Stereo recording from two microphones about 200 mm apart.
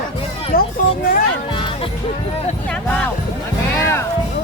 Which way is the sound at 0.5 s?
45° left (ahead or behind).